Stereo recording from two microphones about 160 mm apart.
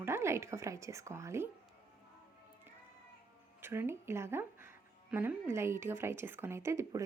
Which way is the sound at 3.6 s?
15° right (ahead or behind).